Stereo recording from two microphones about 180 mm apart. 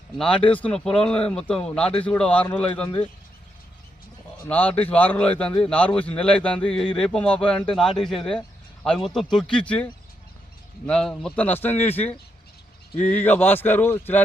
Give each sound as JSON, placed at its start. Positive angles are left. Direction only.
{"t": 0.2, "sound": "a man's voice", "side_deg": 5}
{"t": 4.4, "sound": "a man's voice", "side_deg": 10}